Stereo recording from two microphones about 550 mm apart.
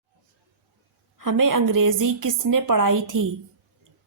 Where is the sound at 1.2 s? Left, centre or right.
Right.